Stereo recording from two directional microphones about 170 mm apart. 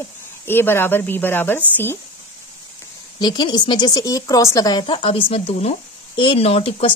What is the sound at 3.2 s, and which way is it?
Speech, 25° left (ahead or behind).